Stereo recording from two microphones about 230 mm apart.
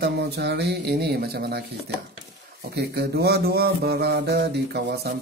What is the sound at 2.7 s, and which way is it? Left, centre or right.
Speech, right.